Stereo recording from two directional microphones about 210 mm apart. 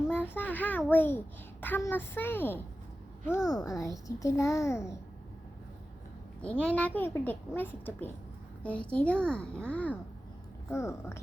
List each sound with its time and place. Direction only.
0.1 s a child's voice: 10° left (ahead or behind)
6.4 s a child's voice: 5° left (ahead or behind)